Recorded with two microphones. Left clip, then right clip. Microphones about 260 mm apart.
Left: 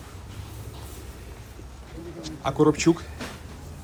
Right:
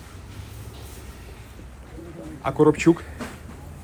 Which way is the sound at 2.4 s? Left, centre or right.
Centre.